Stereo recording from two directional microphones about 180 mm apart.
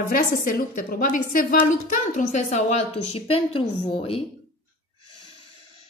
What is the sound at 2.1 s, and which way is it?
Speech, 40° left (ahead or behind).